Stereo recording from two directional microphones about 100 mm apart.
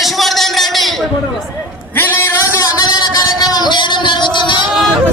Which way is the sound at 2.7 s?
40° left (ahead or behind).